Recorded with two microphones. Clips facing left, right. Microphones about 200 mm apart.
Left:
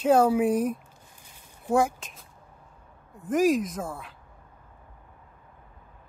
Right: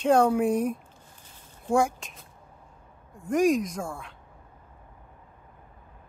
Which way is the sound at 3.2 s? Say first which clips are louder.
Even; centre (ahead or behind).